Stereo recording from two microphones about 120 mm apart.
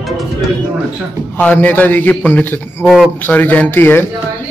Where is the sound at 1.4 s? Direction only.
15° left (ahead or behind).